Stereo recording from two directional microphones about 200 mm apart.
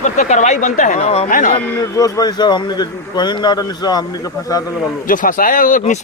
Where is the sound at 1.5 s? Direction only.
20° left (ahead or behind).